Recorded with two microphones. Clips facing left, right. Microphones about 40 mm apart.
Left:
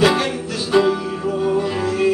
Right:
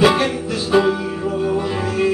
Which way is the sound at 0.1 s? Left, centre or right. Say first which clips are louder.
Right 2 dB; centre.